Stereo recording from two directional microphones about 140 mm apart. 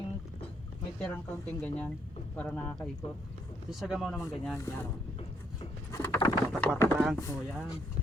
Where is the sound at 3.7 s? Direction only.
Centre (ahead or behind).